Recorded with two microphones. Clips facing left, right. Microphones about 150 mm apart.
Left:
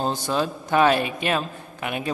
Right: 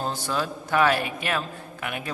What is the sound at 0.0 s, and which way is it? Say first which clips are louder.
A man's voice: left 4 dB; 20° left (ahead or behind).